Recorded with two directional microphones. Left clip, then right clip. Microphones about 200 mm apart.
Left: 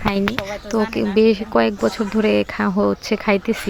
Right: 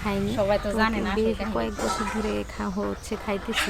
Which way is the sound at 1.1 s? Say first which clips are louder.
Left 10 dB; 35° left (ahead or behind).